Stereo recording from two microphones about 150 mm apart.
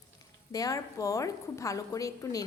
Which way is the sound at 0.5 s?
25° left (ahead or behind).